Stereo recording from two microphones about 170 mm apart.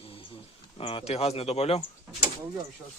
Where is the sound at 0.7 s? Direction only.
35° left (ahead or behind).